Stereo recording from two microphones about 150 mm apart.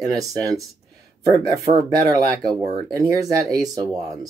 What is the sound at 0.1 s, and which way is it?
Speech, 25° right (ahead or behind).